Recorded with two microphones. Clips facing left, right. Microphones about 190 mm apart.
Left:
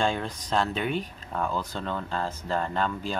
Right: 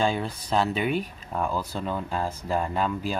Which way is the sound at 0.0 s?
5° right (ahead or behind).